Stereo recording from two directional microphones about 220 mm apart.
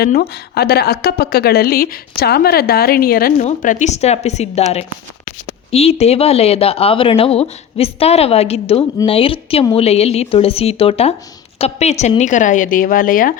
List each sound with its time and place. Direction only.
0.0 s a woman's voice: 45° left (ahead or behind)